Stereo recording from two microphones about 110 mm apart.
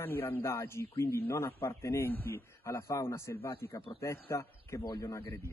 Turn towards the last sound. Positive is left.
turn(degrees=25)  # may be behind; listen again after turning